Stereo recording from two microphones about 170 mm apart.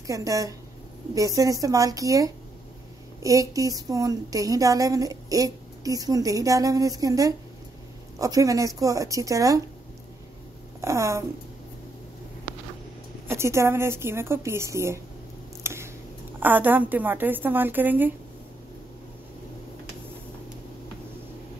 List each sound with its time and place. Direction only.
0.0 s a woman's voice: 20° right (ahead or behind)
10.8 s a woman's voice: 15° right (ahead or behind)
13.3 s a woman's voice: 15° right (ahead or behind)
15.6 s a sound: 15° right (ahead or behind)
16.3 s a woman's voice: 10° right (ahead or behind)